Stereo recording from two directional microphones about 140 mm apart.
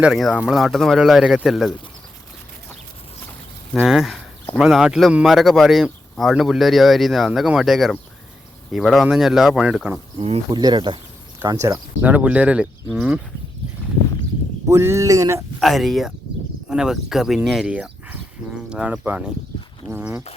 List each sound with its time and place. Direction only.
0.0 s speech: centre (ahead or behind)
3.8 s speech: centre (ahead or behind)
10.2 s speech: 45° right (ahead or behind)
10.5 s speech: 30° right (ahead or behind)
12.0 s speech: 10° right (ahead or behind)
14.7 s speech: 20° right (ahead or behind)
15.6 s speech: centre (ahead or behind); by 20.2 s 15° right (ahead or behind)